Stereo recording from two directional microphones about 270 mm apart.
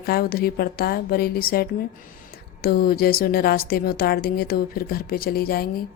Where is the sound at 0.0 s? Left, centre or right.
Left.